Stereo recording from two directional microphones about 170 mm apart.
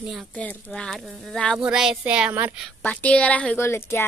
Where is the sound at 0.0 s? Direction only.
Centre (ahead or behind).